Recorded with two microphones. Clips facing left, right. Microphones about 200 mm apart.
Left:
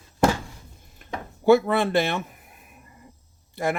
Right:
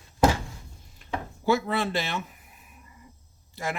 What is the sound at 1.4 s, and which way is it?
Speech, 55° left (ahead or behind).